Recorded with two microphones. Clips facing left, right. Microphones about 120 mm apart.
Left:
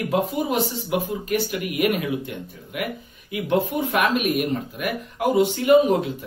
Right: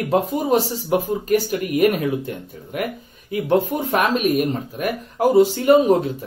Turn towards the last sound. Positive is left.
turn(degrees=-40)  # may be behind; listen again after turning